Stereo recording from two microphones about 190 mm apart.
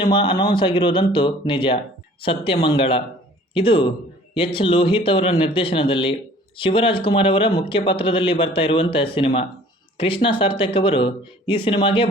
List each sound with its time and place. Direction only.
0.0 s speech: 25° left (ahead or behind)